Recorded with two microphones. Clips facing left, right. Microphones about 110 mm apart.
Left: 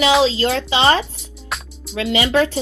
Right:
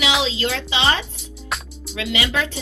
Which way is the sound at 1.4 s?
Centre (ahead or behind).